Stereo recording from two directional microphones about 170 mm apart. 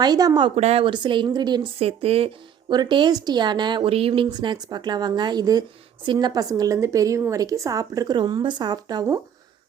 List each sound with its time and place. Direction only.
0.0 s a woman's voice: 20° right (ahead or behind)